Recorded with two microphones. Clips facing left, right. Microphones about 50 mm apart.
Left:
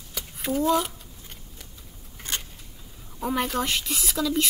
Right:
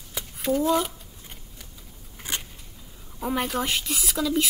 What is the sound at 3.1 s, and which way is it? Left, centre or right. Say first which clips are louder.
A woman's voice: even; centre.